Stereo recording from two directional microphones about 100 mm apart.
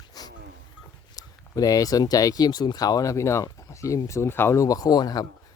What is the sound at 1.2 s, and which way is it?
Speech, 35° left (ahead or behind).